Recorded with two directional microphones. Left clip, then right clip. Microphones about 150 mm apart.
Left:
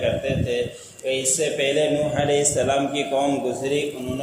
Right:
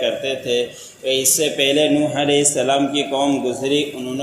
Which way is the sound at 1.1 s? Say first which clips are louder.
Right 4 dB; 30° right (ahead or behind).